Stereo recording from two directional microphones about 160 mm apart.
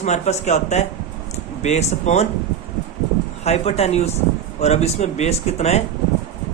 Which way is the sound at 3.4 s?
40° left (ahead or behind).